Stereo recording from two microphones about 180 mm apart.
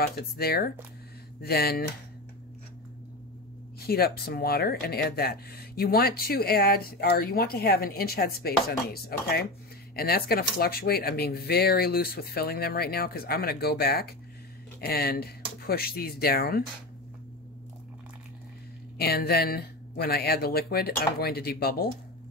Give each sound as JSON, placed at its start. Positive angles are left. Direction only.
{"t": 0.0, "sound": "speech", "side_deg": 60}
{"t": 3.8, "sound": "speech", "side_deg": 60}
{"t": 18.9, "sound": "speech", "side_deg": 60}